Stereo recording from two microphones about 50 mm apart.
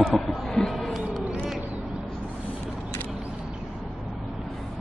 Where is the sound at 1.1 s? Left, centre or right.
Centre.